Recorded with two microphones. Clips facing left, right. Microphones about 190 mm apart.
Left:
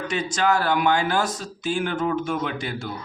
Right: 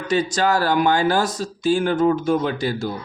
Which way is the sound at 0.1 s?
35° right (ahead or behind).